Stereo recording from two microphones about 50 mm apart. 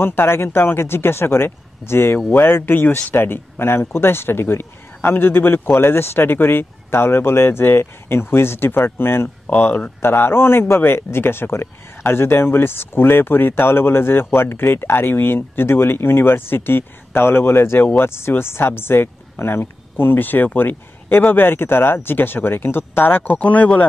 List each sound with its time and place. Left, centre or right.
0.0 s speech: left
23.3 s speech: left